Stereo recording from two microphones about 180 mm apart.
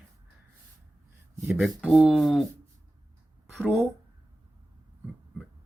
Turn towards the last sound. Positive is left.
turn(degrees=0)  # may be behind; listen again after turning